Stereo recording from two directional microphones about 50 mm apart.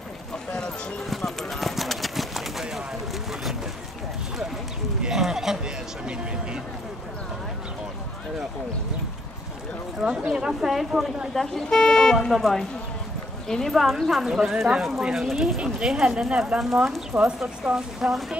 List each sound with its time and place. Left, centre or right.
0.5 s music: centre
1.1 s clip-clop: centre
5.0 s a sound: centre
9.9 s speech: centre
11.3 s speech: centre
17.1 s speech: right
17.6 s speech: centre